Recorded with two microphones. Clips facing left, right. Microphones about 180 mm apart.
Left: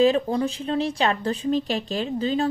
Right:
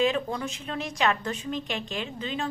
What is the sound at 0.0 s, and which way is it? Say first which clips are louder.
A woman's voice: left 7 dB; 35° left (ahead or behind).